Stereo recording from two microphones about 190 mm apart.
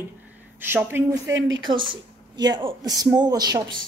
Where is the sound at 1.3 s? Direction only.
85° right.